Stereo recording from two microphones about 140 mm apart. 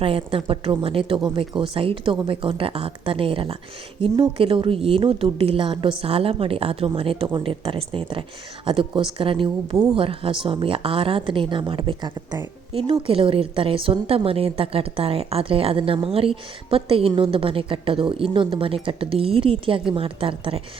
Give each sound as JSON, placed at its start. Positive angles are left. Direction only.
{"t": 0.0, "sound": "a woman's voice", "side_deg": -40}